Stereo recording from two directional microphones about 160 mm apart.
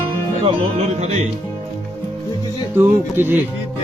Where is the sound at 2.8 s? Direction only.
15° right (ahead or behind).